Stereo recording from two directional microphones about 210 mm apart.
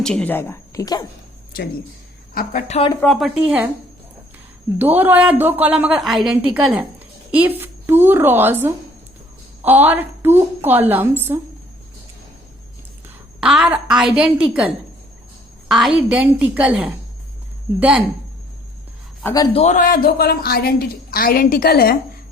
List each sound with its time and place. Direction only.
0.0 s a woman's voice: 5° left (ahead or behind)
2.3 s a man's voice: 45° left (ahead or behind)
2.7 s speech: 25° left (ahead or behind)
3.0 s a woman's voice: centre (ahead or behind)
4.8 s a woman's voice: 10° right (ahead or behind)
13.4 s a woman's voice: 5° right (ahead or behind)
15.7 s a woman's voice: 5° right (ahead or behind)
19.2 s a woman's voice: 20° left (ahead or behind)
19.6 s a man's voice: 40° left (ahead or behind)